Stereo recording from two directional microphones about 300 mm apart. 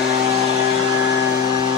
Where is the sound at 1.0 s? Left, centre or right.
Left.